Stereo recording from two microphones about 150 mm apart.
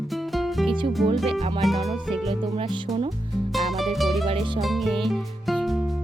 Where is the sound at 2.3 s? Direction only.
45° right (ahead or behind).